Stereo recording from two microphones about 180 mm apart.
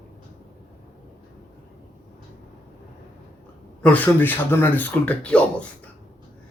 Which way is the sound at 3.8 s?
10° left (ahead or behind).